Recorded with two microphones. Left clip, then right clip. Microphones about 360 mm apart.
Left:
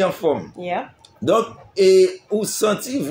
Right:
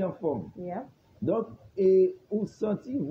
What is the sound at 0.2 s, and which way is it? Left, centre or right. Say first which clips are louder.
A man's voice: left 11 dB; right.